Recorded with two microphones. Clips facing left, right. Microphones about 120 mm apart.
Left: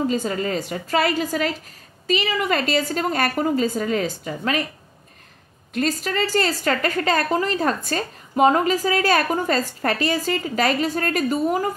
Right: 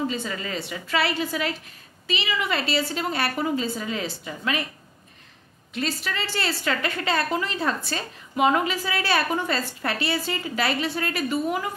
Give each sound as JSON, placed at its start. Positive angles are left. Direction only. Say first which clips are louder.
{"t": 0.1, "sound": "a woman's voice", "louder": "left 7 dB", "side_deg": 45}
{"t": 5.8, "sound": "a woman's voice", "louder": "left 6 dB", "side_deg": 45}